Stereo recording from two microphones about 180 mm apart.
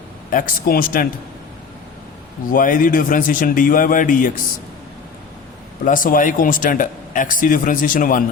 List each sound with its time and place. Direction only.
0.3 s speech: 50° left (ahead or behind)
2.5 s speech: 50° left (ahead or behind)
5.8 s speech: 50° left (ahead or behind)